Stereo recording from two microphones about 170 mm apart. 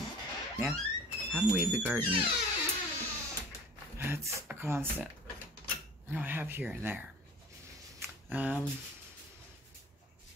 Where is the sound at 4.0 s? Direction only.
10° right (ahead or behind).